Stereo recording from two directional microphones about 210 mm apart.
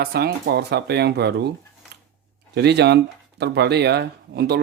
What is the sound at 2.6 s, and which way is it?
Speech, 50° right (ahead or behind).